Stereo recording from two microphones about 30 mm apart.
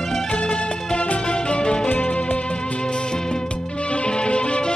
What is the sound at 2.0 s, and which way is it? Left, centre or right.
Music, left.